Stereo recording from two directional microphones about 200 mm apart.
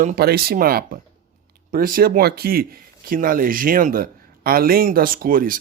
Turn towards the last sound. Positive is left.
turn(degrees=-45)  # may be behind; listen again after turning